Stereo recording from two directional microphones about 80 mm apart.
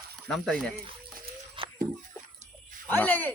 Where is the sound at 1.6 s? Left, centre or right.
Right.